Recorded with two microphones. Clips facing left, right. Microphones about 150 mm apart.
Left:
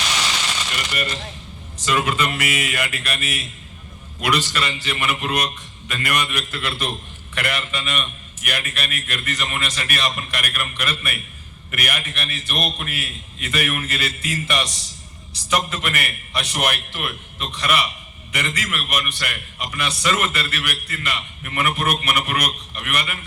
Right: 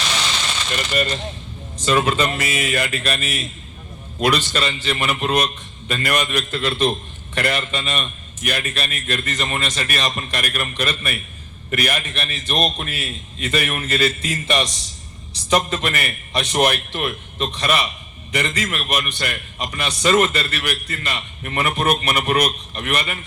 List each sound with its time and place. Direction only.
1.8 s a man's voice: 30° right (ahead or behind)